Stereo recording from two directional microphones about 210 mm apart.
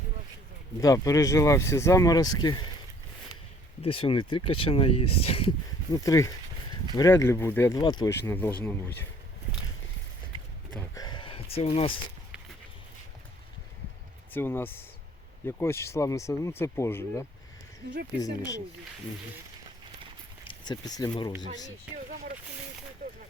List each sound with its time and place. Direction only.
0.8 s speech: 15° left (ahead or behind)
3.8 s speech: 25° left (ahead or behind)
10.7 s a sound: 10° left (ahead or behind)
11.0 s a sound: 20° left (ahead or behind)
14.3 s speech: 10° left (ahead or behind)
20.4 s speech: 20° left (ahead or behind)
21.9 s speech: 5° right (ahead or behind)